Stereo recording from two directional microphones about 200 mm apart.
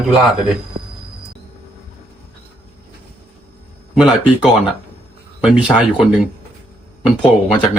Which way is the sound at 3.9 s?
Centre (ahead or behind).